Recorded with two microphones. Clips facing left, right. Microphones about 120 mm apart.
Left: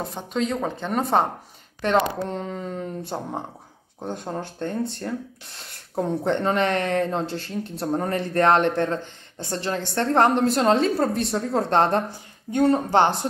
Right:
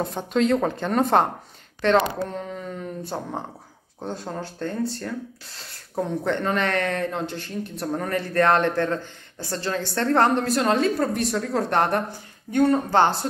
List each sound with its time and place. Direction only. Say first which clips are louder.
0.0 s speech: right 4 dB; centre (ahead or behind)
1.8 s speech: right 2 dB; 15° left (ahead or behind)
2.2 s speech: left 2 dB; 25° left (ahead or behind)
6.2 s speech: left 3 dB; 25° left (ahead or behind)